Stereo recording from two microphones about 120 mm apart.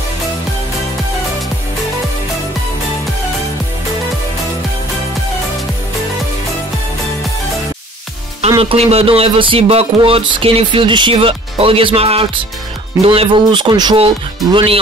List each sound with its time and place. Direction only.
8.5 s speech: 50° right (ahead or behind); by 13.9 s 35° right (ahead or behind)
13.9 s speech: 50° right (ahead or behind)